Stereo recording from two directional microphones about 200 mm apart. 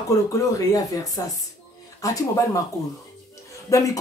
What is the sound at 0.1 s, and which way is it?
A woman's voice, 15° left (ahead or behind).